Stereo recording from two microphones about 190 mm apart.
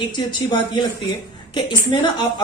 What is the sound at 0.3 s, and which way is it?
A woman's voice, 25° left (ahead or behind).